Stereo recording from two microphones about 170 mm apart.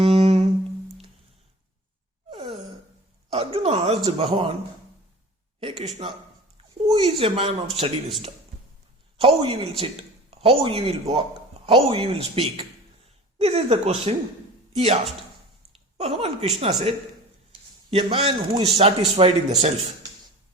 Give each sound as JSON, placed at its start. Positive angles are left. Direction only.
{"t": 0.0, "sound": "humming", "side_deg": -35}
{"t": 2.3, "sound": "gasp", "side_deg": -35}
{"t": 3.3, "sound": "speech", "side_deg": -35}
{"t": 5.5, "sound": "speech", "side_deg": -30}
{"t": 9.1, "sound": "speech", "side_deg": -30}
{"t": 16.0, "sound": "speech", "side_deg": -35}
{"t": 17.9, "sound": "speech", "side_deg": -35}